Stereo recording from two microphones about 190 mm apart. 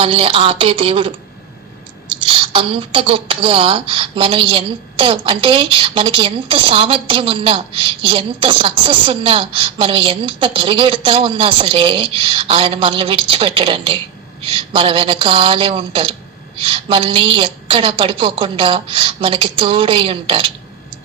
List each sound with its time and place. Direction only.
0.0 s speech: 30° right (ahead or behind)
2.2 s speech: 30° right (ahead or behind)